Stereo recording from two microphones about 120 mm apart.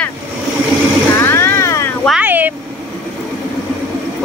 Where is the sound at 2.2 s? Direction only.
15° right (ahead or behind).